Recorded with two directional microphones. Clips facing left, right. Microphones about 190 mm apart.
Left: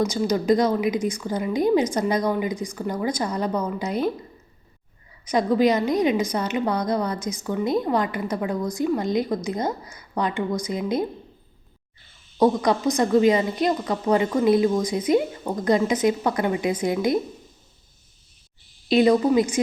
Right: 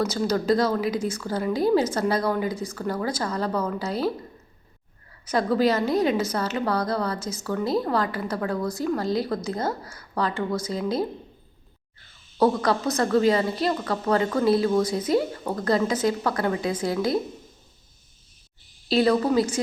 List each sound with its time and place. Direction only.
0.0 s a woman's voice: 15° left (ahead or behind)
5.3 s a woman's voice: 15° left (ahead or behind)
12.4 s a woman's voice: 15° left (ahead or behind)
18.9 s a woman's voice: 15° left (ahead or behind)